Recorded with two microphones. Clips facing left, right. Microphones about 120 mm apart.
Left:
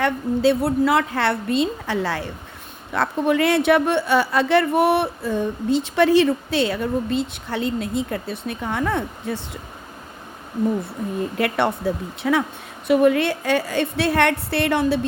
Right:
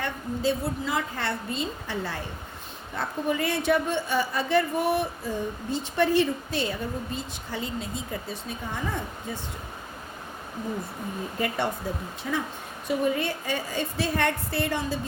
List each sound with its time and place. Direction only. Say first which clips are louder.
0.0 s a man's voice: left 9 dB; 70° left (ahead or behind)
11.3 s a man's voice: left 6 dB; 75° left (ahead or behind)